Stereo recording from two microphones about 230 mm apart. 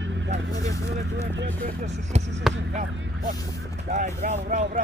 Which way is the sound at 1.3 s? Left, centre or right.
Right.